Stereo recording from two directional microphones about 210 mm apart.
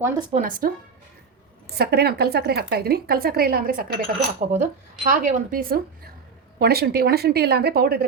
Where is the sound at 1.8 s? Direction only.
50° right (ahead or behind).